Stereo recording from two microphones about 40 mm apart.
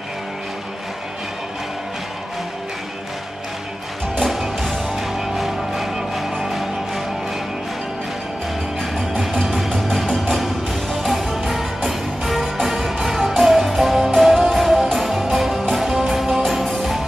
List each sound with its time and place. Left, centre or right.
4.2 s music: centre
8.9 s music: centre